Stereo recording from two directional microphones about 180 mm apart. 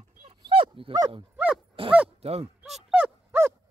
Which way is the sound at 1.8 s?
30° right (ahead or behind).